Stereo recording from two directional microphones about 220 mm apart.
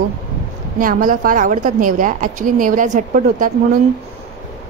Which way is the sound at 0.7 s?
40° right (ahead or behind).